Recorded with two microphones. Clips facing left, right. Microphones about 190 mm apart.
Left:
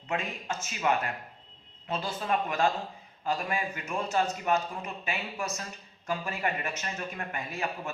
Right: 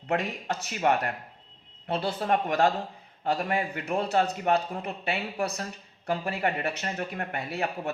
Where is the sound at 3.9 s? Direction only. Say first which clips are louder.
Right 4 dB; 65° right (ahead or behind).